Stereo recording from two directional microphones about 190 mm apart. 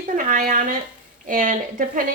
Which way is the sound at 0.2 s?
45° right (ahead or behind).